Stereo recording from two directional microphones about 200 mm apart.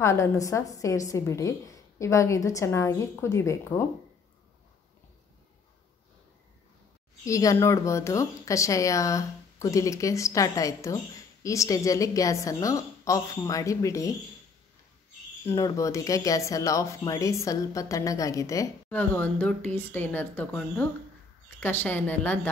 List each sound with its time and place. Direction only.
0.0 s a woman's voice: 15° left (ahead or behind)
7.2 s a woman's voice: 15° left (ahead or behind)
15.4 s a woman's voice: 15° left (ahead or behind)